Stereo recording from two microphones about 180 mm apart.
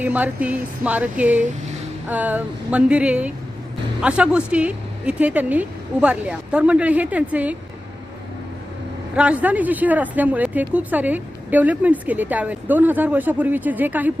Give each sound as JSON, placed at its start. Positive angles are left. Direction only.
{"t": 0.0, "sound": "speech", "side_deg": -10}
{"t": 9.1, "sound": "speech", "side_deg": -5}